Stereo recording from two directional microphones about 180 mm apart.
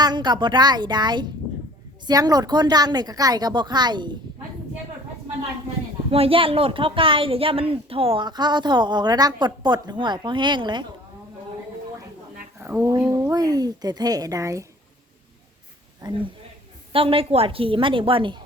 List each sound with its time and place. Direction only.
0.0 s speech: 25° right (ahead or behind)
6.1 s speech: 30° right (ahead or behind)
12.5 s a sound: 10° right (ahead or behind)
12.9 s speech: 20° right (ahead or behind)
16.0 s speech: 25° right (ahead or behind)